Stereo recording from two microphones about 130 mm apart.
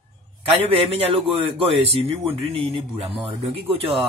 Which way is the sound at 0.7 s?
45° right (ahead or behind).